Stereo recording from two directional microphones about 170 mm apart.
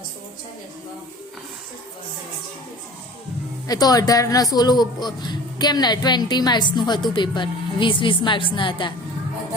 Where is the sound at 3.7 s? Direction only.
20° left (ahead or behind).